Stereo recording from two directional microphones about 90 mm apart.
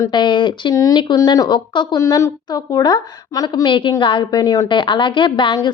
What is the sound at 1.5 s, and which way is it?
Speech, 60° left (ahead or behind).